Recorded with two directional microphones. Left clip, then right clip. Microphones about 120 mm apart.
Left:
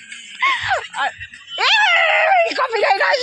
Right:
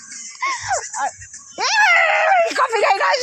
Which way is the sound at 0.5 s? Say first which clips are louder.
Left 3 dB; 45° right (ahead or behind).